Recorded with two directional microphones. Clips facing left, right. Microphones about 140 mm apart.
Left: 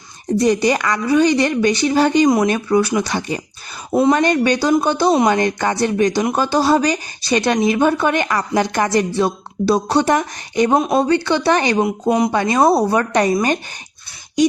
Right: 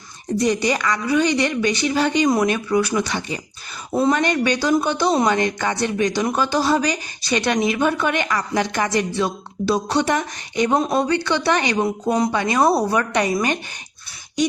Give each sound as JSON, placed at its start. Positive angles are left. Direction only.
{"t": 0.3, "sound": "speech", "side_deg": 35}